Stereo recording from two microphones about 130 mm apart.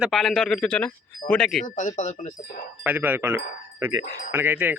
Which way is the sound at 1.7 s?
75° left (ahead or behind).